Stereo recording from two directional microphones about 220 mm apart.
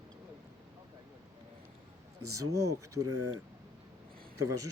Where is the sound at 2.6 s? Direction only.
90° right.